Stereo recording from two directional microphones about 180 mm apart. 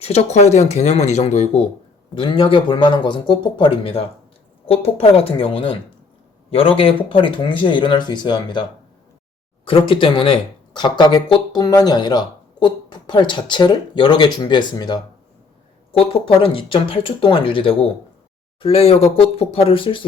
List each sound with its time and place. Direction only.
0.0 s speech: 35° left (ahead or behind)
9.6 s speech: 30° left (ahead or behind)